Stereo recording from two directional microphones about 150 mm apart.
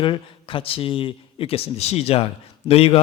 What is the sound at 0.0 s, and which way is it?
A man's voice, 35° left (ahead or behind).